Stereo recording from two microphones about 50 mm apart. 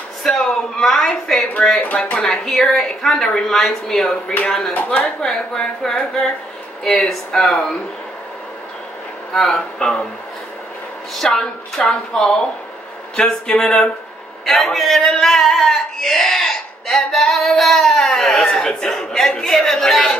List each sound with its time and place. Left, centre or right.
0.2 s a woman's voice: centre
4.7 s speech: left
5.0 s a woman's voice: centre
9.3 s a woman's voice: centre
11.1 s a woman's voice: centre